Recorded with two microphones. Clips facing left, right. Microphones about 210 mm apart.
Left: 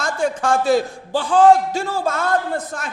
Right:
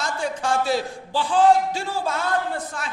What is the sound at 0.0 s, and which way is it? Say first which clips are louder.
A man's voice: left 5 dB; 50° left (ahead or behind).